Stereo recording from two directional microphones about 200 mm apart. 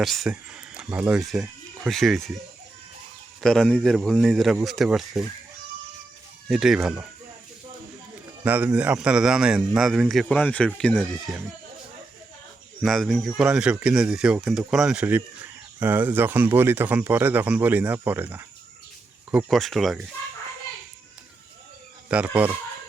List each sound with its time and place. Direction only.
0.0 s speech: centre (ahead or behind)
3.4 s speech: 5° left (ahead or behind)
6.5 s speech: centre (ahead or behind)
8.4 s speech: 5° right (ahead or behind)
12.8 s speech: centre (ahead or behind)
22.1 s speech: 5° right (ahead or behind)